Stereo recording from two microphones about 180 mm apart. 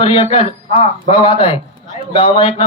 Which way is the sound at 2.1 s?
30° left (ahead or behind).